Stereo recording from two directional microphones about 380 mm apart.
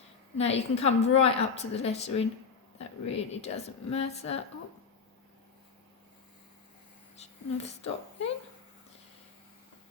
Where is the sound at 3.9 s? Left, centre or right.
Centre.